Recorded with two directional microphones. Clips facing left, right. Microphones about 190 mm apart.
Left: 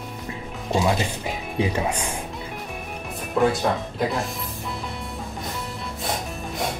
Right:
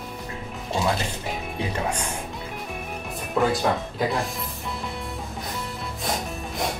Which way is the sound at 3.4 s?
Centre (ahead or behind).